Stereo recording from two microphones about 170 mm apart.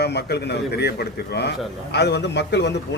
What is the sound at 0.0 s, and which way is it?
A man's voice, 75° left (ahead or behind).